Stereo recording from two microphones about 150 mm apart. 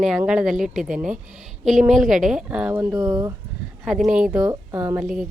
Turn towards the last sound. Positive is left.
turn(degrees=-5)  # may be behind; listen again after turning